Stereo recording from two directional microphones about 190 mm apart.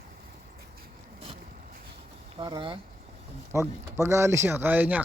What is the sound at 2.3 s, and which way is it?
Speech, 25° right (ahead or behind).